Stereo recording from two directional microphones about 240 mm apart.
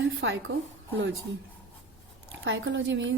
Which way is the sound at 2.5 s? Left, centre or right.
Right.